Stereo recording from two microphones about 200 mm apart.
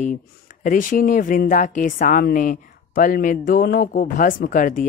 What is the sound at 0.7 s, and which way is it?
Speech, 40° left (ahead or behind).